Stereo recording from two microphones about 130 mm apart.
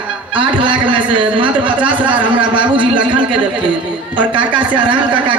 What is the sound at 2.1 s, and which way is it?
A man's voice, 40° right (ahead or behind).